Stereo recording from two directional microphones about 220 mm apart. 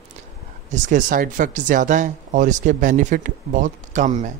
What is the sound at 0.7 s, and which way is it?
Speech, 35° right (ahead or behind).